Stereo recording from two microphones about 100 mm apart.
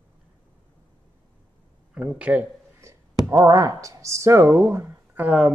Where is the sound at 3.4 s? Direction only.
40° right (ahead or behind).